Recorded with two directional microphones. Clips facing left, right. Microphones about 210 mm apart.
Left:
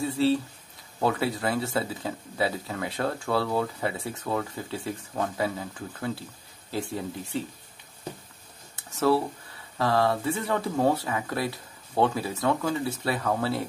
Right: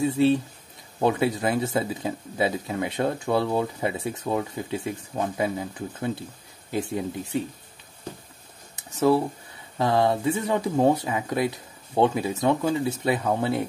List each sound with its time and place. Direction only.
0.0 s speech: 20° right (ahead or behind)
8.7 s a sound: 15° right (ahead or behind)
9.8 s speech: 20° right (ahead or behind)